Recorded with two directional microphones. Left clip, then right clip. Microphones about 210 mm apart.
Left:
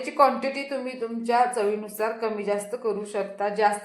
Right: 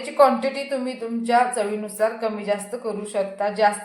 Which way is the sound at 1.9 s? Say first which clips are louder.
Right 4 dB; 30° left (ahead or behind).